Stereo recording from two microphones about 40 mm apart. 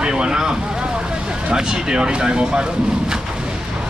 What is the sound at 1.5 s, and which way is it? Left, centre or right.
Speech, centre.